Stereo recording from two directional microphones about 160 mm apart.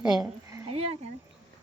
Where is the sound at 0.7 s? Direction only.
40° right (ahead or behind).